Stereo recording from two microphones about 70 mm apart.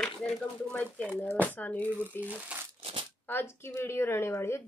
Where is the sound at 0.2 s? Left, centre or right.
Centre.